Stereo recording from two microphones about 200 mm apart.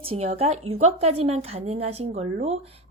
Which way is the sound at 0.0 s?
30° right (ahead or behind).